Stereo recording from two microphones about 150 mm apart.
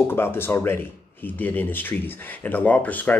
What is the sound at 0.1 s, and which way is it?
Speech, 15° left (ahead or behind).